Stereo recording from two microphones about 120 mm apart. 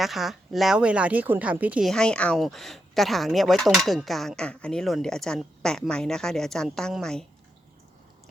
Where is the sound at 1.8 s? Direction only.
5° left (ahead or behind).